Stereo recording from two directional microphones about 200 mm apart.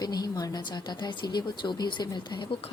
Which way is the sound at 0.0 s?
20° left (ahead or behind).